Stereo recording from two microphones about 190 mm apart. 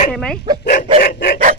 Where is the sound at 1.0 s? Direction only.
50° left (ahead or behind).